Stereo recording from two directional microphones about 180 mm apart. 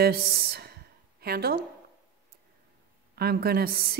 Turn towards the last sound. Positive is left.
turn(degrees=-60)  # may be behind; listen again after turning